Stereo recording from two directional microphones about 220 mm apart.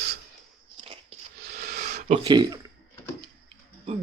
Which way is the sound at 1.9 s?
35° right (ahead or behind).